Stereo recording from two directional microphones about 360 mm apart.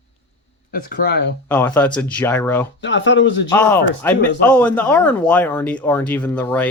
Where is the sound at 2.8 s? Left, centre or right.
Left.